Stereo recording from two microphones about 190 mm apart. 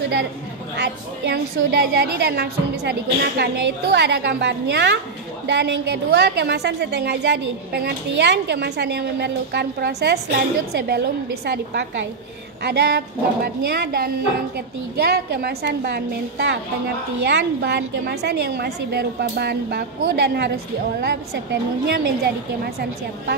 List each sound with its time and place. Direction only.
0.7 s a woman's voice: 60° right (ahead or behind)